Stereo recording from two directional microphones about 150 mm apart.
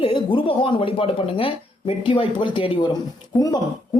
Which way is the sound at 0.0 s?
35° left (ahead or behind).